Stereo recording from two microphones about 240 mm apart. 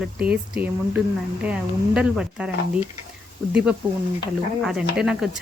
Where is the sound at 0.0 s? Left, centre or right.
Centre.